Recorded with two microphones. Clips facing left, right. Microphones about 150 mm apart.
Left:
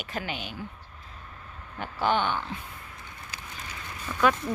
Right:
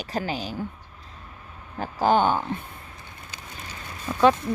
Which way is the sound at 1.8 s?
40° right (ahead or behind).